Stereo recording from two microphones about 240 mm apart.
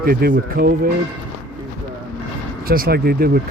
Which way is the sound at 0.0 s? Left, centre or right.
Right.